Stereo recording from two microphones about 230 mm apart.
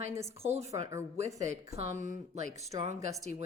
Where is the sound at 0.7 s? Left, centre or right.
Centre.